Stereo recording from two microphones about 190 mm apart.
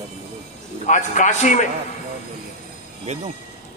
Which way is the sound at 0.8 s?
40° left (ahead or behind).